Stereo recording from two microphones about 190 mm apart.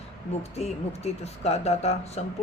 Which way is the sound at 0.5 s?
35° left (ahead or behind).